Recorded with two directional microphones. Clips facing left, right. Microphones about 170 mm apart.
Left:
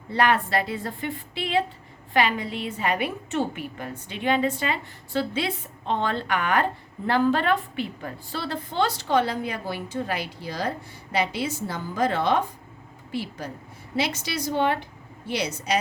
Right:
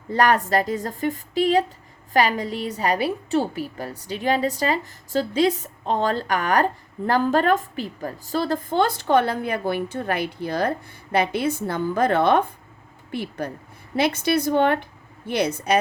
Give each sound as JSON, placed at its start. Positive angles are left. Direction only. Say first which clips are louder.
{"t": 0.1, "sound": "a woman's voice", "louder": "right 3 dB", "side_deg": -40}